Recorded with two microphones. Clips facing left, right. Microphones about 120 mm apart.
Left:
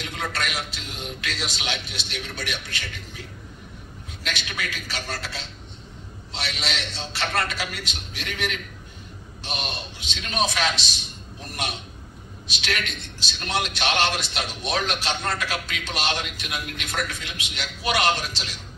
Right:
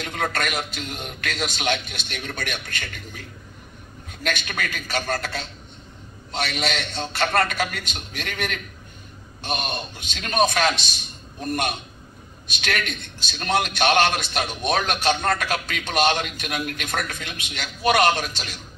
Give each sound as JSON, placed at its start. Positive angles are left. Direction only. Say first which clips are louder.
{"t": 0.0, "sound": "a man's voice", "louder": "right 4 dB", "side_deg": -50}